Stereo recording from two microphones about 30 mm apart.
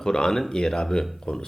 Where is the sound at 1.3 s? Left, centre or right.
Left.